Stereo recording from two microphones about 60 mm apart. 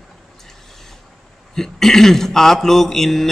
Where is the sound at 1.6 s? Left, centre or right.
Centre.